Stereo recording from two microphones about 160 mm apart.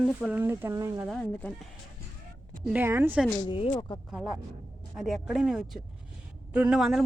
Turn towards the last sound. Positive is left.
turn(degrees=0)  # may be behind; listen again after turning